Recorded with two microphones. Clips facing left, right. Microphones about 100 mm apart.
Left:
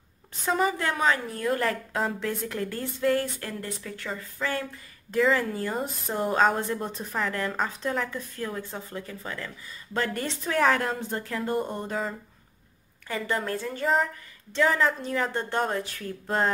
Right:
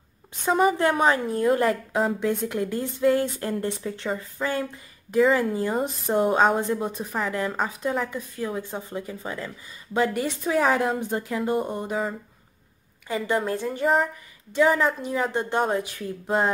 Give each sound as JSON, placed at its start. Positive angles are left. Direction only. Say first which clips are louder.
{"t": 0.5, "sound": "a woman's voice", "louder": "right 4 dB", "side_deg": -5}
{"t": 0.7, "sound": "a woman's voice", "louder": "right 5 dB", "side_deg": -30}
{"t": 9.9, "sound": "a woman's voice", "louder": "right 5 dB", "side_deg": -10}